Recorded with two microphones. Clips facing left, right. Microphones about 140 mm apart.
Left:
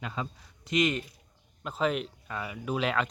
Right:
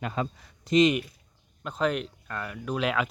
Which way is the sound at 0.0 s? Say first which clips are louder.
Right 5 dB; 55° right (ahead or behind).